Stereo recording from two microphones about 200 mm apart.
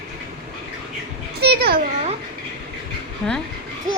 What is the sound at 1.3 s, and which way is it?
Speech, 55° right (ahead or behind).